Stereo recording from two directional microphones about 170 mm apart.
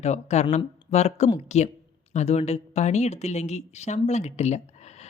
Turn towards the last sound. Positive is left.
turn(degrees=40)  # may be behind; listen again after turning